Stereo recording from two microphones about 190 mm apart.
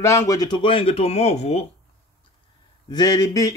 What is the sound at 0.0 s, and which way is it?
Speech, 15° left (ahead or behind).